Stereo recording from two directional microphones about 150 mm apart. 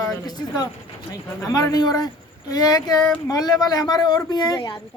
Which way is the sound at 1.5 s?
25° left (ahead or behind).